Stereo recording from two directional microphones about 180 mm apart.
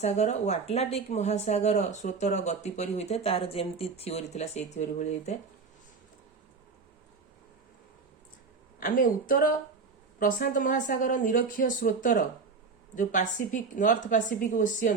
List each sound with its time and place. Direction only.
0.0 s a woman's voice: 40° left (ahead or behind)
8.8 s a woman's voice: 50° left (ahead or behind)